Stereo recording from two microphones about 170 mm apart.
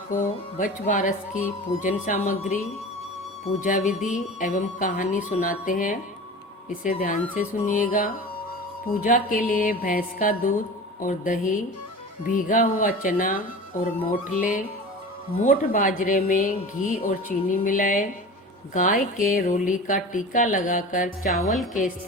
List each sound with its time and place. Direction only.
0.6 s speech: 50° left (ahead or behind)